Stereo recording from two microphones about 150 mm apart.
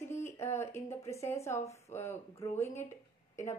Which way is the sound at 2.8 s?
20° left (ahead or behind).